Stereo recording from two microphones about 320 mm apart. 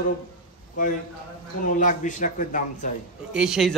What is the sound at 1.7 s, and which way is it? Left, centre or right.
A man's voice, left.